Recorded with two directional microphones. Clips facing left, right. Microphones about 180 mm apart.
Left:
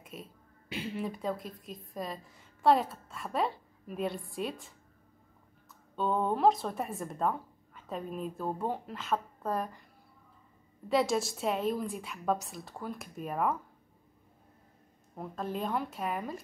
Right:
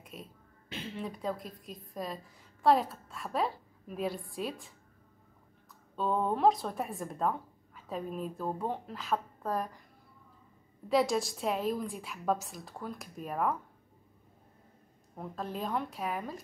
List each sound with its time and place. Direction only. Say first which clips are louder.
0.0 s a sound: left 1 dB; centre (ahead or behind)
0.7 s a woman's voice: left 3 dB; 10° left (ahead or behind)
5.9 s a woman's voice: left 1 dB; centre (ahead or behind)
10.9 s a woman's voice: even; centre (ahead or behind)
15.1 s a woman's voice: left 2 dB; centre (ahead or behind)